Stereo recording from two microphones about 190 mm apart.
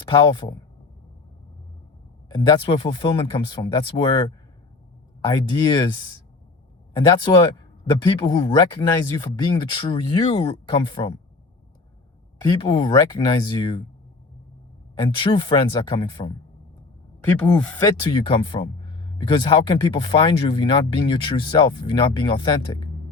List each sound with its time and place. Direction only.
0.0 s speech: 25° left (ahead or behind)
2.3 s speech: 25° left (ahead or behind)
12.4 s speech: 25° left (ahead or behind)
14.9 s speech: 25° left (ahead or behind)
17.2 s speech: 5° left (ahead or behind)
17.8 s speech: 25° left (ahead or behind)